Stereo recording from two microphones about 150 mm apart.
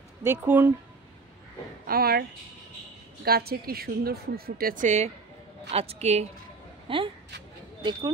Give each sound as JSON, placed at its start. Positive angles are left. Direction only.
{"t": 0.2, "sound": "speech", "side_deg": -15}
{"t": 1.9, "sound": "speech", "side_deg": -90}
{"t": 3.3, "sound": "speech", "side_deg": -90}
{"t": 4.8, "sound": "a woman's voice", "side_deg": -50}